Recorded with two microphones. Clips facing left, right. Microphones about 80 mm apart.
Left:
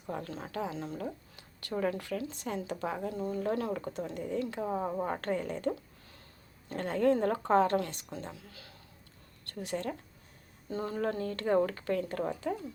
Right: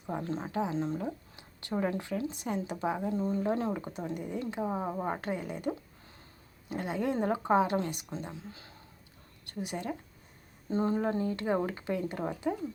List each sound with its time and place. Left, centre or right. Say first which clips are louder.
0.1 s a woman's voice: right 4 dB; right
10.7 s speech: right 4 dB; right